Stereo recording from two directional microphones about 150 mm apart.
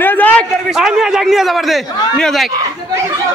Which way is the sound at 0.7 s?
5° right (ahead or behind).